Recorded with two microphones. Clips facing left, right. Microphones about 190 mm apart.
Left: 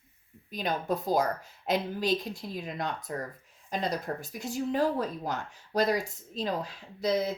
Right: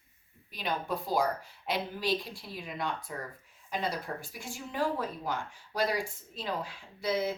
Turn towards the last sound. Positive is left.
turn(degrees=40)  # may be behind; listen again after turning